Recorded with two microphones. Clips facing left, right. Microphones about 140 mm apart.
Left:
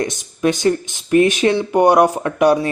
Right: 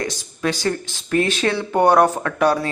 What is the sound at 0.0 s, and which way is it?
Speech, 20° left (ahead or behind).